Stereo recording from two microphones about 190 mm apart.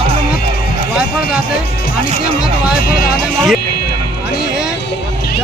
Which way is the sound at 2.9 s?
55° left (ahead or behind).